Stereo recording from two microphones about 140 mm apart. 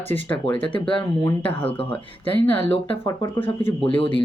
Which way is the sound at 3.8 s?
40° left (ahead or behind).